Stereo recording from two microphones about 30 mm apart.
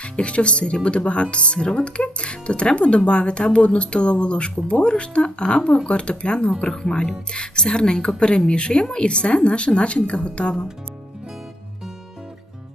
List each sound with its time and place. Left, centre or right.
0.0 s speech: left